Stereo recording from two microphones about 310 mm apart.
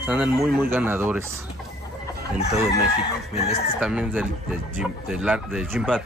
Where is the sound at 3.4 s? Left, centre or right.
Left.